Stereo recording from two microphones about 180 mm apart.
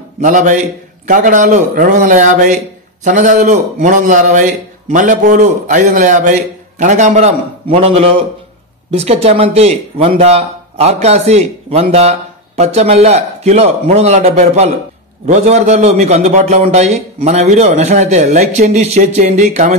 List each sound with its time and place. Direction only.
0.2 s a man's voice: 45° right (ahead or behind)